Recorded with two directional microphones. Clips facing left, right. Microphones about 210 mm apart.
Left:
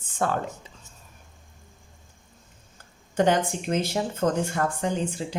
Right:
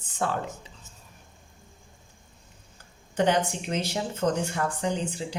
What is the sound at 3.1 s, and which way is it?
Speech, 50° left (ahead or behind).